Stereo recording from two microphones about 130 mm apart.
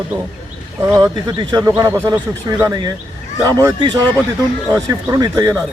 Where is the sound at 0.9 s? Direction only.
25° right (ahead or behind).